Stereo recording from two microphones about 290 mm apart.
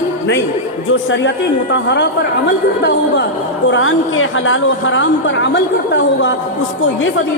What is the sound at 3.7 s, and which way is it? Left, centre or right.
A woman's voice, left.